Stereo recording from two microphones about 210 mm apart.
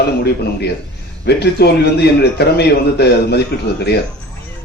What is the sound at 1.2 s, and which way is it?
Speech, 50° left (ahead or behind).